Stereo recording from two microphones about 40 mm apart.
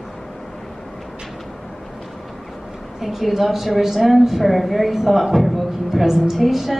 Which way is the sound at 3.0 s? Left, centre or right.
Centre.